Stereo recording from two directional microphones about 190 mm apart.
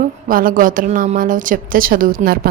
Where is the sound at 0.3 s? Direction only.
50° right (ahead or behind).